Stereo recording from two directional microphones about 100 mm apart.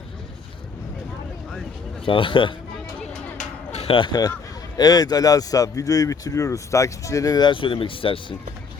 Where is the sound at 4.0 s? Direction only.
45° left (ahead or behind).